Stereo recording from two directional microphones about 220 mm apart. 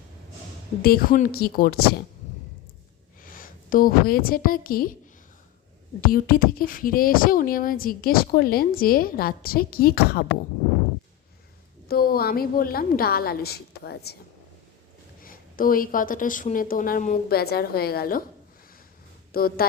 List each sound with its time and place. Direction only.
0.8 s a woman's voice: 45° left (ahead or behind)
3.2 s a woman's voice: 40° left (ahead or behind)
6.0 s speech: 40° left (ahead or behind)
11.9 s a woman's voice: 40° left (ahead or behind)
15.2 s speech: 40° left (ahead or behind)
19.3 s speech: 45° left (ahead or behind)